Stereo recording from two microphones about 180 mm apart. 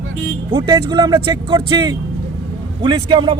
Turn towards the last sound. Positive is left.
turn(degrees=-25)  # may be behind; listen again after turning